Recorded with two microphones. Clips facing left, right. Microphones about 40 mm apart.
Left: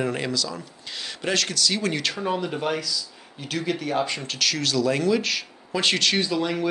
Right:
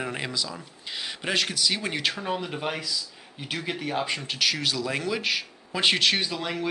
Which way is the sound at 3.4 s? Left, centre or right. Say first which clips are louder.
Left 4 dB; centre.